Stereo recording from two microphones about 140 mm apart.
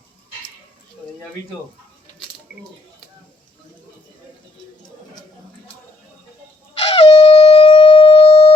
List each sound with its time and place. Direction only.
6.9 s shofar: 45° left (ahead or behind)